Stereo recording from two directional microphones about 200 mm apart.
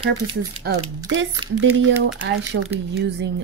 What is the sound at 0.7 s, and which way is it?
Speech, 50° right (ahead or behind).